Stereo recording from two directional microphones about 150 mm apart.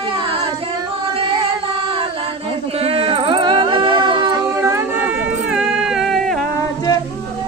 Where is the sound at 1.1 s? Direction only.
35° right (ahead or behind).